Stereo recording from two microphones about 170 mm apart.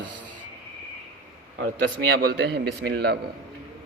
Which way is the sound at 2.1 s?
70° right (ahead or behind).